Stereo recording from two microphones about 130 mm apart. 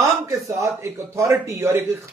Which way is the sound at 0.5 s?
25° right (ahead or behind).